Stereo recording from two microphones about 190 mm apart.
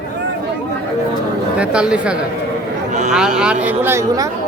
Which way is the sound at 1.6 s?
5° right (ahead or behind).